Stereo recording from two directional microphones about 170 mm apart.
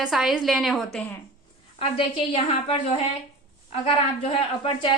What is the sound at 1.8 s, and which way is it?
A woman's voice, 30° left (ahead or behind).